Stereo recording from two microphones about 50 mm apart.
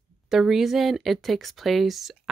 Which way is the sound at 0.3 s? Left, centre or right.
Centre.